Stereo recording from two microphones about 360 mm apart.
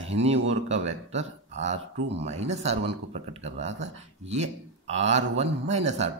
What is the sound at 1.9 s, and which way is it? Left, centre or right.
Speech, right.